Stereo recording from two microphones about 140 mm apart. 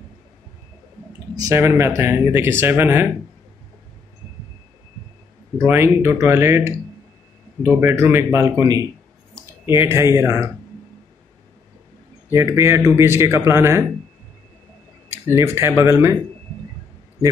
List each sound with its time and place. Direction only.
1.3 s speech: 20° right (ahead or behind)
5.7 s a man's voice: 15° right (ahead or behind)
9.3 s clicking: 20° right (ahead or behind)
10.1 s speech: 20° right (ahead or behind)
12.3 s a man's voice: 20° right (ahead or behind)
15.0 s speech: 20° right (ahead or behind)